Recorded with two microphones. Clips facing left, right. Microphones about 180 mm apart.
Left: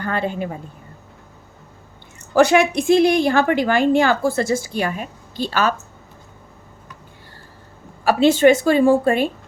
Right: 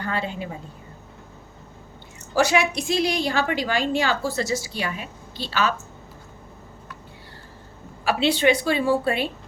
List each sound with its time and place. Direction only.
0.0 s a woman's voice: 55° left (ahead or behind)
2.3 s a woman's voice: 55° left (ahead or behind)
8.0 s a woman's voice: 45° left (ahead or behind)